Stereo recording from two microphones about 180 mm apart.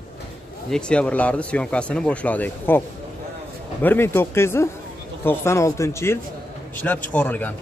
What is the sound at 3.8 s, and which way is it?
Speech, 10° left (ahead or behind).